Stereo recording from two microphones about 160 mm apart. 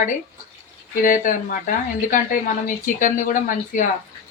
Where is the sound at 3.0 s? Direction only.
55° left (ahead or behind).